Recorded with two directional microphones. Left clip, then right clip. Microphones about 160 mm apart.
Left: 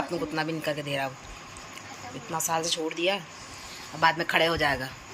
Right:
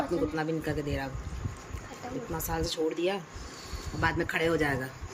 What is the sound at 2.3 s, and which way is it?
Speech, 15° right (ahead or behind).